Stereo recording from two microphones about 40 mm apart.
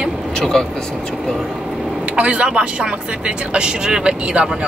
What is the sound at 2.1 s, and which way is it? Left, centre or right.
Speech, right.